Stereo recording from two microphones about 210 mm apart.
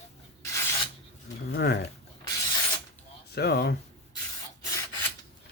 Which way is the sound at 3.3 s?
50° left (ahead or behind).